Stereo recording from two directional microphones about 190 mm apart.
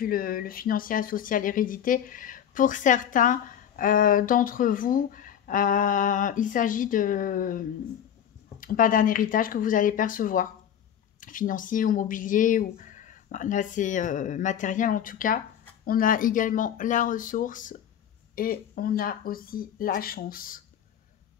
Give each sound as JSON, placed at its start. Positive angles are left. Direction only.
{"t": 0.0, "sound": "speech", "side_deg": 50}